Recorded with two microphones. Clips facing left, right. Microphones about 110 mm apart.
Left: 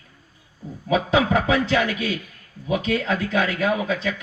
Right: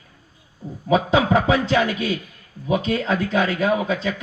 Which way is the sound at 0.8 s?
30° right (ahead or behind).